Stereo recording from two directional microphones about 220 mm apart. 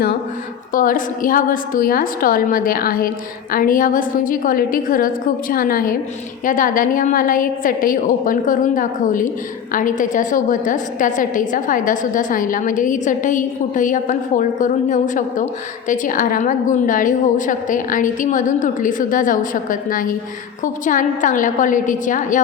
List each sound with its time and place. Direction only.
0.7 s a woman's voice: 40° left (ahead or behind)